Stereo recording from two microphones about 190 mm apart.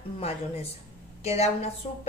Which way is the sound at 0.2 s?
30° left (ahead or behind).